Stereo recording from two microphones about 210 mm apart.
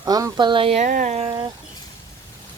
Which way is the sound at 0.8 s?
40° right (ahead or behind).